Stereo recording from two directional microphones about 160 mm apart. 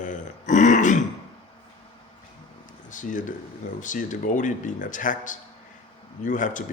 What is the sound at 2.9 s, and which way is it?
Speech, 55° left (ahead or behind).